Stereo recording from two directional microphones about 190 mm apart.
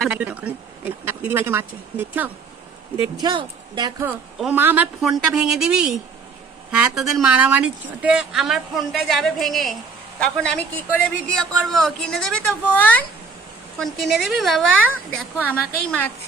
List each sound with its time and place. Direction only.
0.0 s a sound: 5° right (ahead or behind)
3.0 s speech: 25° right (ahead or behind)
4.4 s speech: 10° right (ahead or behind)
7.0 s a woman's voice: centre (ahead or behind)